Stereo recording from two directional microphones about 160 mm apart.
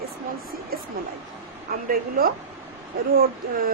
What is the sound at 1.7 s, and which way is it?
Speech, 75° right (ahead or behind).